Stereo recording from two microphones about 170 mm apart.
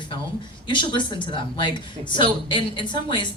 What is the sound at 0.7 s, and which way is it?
Speech, 25° left (ahead or behind).